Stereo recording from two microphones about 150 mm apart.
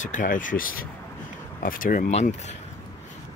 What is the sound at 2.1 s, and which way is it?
Speech, 45° left (ahead or behind).